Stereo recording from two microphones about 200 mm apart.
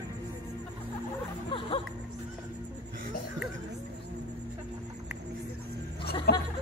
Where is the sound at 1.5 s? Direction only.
25° left (ahead or behind).